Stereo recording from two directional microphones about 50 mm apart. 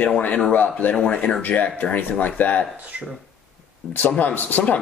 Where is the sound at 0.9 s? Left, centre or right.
Left.